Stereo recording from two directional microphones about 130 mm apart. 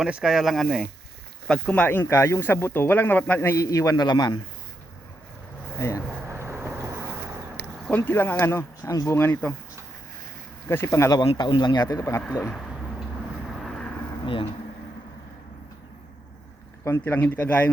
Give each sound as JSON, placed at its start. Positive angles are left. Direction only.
{"t": 0.0, "sound": "speech", "side_deg": -5}
{"t": 6.2, "sound": "vehicle", "side_deg": -15}
{"t": 7.9, "sound": "speech", "side_deg": 15}
{"t": 10.7, "sound": "speech", "side_deg": 20}
{"t": 11.3, "sound": "speech", "side_deg": 35}
{"t": 12.5, "sound": "a sound", "side_deg": 0}
{"t": 13.6, "sound": "vehicle", "side_deg": 5}
{"t": 16.8, "sound": "speech", "side_deg": 20}